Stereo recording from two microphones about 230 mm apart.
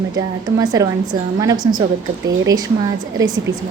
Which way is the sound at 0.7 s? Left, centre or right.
Centre.